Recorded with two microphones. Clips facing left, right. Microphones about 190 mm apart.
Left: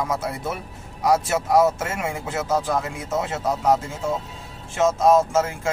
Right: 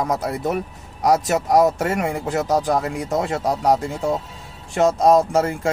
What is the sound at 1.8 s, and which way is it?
Speech, 65° right (ahead or behind).